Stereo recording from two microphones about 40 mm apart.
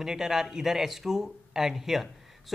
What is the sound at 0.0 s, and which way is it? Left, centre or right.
Speech, centre.